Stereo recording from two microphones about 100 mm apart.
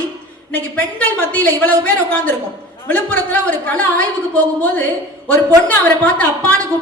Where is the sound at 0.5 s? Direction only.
15° left (ahead or behind).